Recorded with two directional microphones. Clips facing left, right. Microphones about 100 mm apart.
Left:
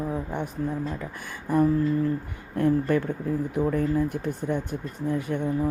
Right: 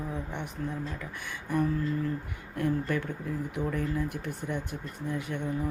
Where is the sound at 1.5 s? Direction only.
40° left (ahead or behind).